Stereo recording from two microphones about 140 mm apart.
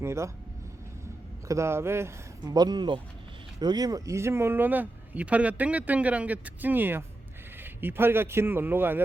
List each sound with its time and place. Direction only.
0.0 s speech: 20° right (ahead or behind)
1.5 s speech: 20° right (ahead or behind)